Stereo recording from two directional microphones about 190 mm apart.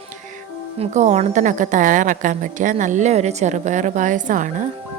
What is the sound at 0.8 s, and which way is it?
A woman's voice, 40° right (ahead or behind).